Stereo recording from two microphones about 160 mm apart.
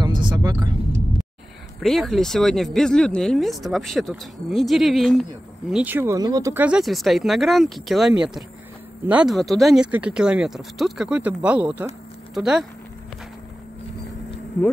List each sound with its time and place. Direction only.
0.0 s vehicle: 30° right (ahead or behind)
1.8 s speech: centre (ahead or behind); by 6.5 s 25° right (ahead or behind)
6.5 s speech: 10° right (ahead or behind)